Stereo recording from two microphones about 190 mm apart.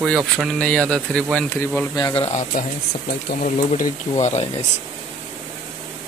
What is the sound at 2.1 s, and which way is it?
Speech, 35° left (ahead or behind).